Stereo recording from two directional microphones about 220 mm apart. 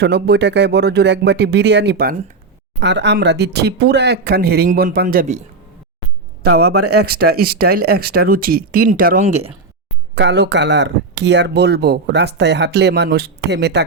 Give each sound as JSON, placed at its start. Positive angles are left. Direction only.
{"t": 0.0, "sound": "speech", "side_deg": -50}
{"t": 6.5, "sound": "speech", "side_deg": -45}
{"t": 6.7, "sound": "speech", "side_deg": -90}
{"t": 7.0, "sound": "speech", "side_deg": -45}
{"t": 10.2, "sound": "speech", "side_deg": -50}